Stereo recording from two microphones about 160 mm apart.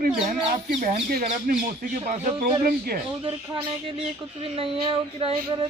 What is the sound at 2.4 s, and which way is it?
Speech, 65° right (ahead or behind).